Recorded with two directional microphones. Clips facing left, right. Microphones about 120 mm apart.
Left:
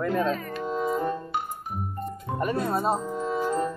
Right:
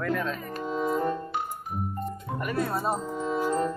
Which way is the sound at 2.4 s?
30° left (ahead or behind).